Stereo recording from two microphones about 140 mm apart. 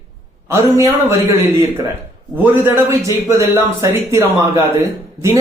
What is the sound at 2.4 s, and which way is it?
A man's voice, 15° right (ahead or behind).